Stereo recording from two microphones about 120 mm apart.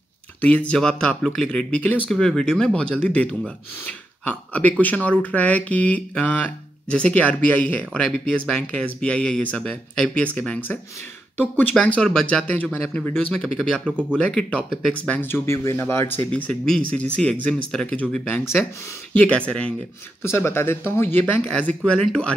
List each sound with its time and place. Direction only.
0.4 s speech: 10° left (ahead or behind)
16.3 s speech: 10° left (ahead or behind)
18.4 s speech: 5° right (ahead or behind)
19.1 s speech: 10° left (ahead or behind)
20.2 s speech: 20° left (ahead or behind); by 22.3 s 5° left (ahead or behind)